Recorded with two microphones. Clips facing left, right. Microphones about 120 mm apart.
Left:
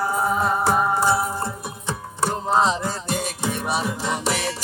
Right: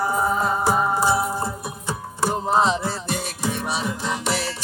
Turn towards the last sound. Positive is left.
turn(degrees=0)  # may be behind; listen again after turning